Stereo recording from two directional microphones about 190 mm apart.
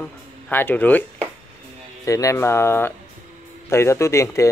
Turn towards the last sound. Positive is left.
turn(degrees=15)  # may be behind; listen again after turning